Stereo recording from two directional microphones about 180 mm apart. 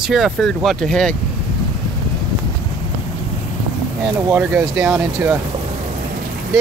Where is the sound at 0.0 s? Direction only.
Centre (ahead or behind).